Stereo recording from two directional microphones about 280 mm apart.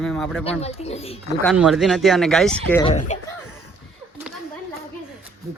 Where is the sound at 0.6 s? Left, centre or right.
Left.